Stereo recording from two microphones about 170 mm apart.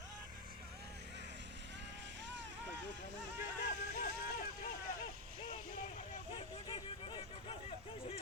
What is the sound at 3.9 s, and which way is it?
Boat, 60° left (ahead or behind).